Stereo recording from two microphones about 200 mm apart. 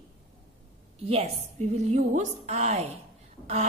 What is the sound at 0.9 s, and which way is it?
A woman's voice, 30° right (ahead or behind).